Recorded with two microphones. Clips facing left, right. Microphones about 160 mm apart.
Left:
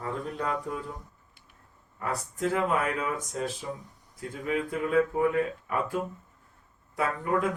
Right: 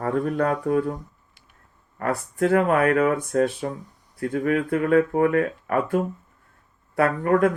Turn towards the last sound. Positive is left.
turn(degrees=-65)  # may be behind; listen again after turning